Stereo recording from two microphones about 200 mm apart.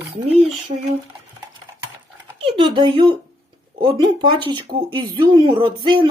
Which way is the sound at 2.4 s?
25° right (ahead or behind).